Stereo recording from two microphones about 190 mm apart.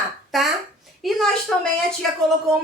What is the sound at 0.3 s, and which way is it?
Speech, centre (ahead or behind).